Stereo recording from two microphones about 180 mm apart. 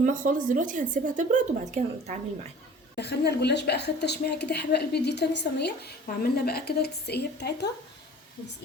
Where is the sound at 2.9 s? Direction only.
65° left (ahead or behind).